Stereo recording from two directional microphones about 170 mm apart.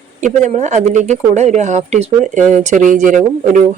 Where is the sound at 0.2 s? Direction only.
45° right (ahead or behind).